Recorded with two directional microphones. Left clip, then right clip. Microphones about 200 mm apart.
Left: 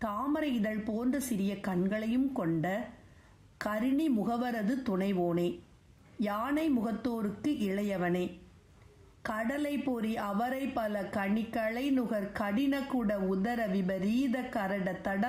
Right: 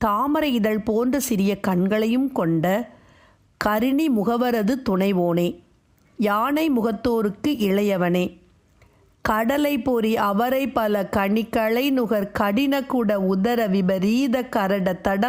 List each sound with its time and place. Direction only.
0.0 s a woman's voice: 50° right (ahead or behind)